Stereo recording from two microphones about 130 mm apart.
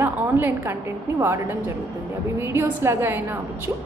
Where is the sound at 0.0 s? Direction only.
15° right (ahead or behind).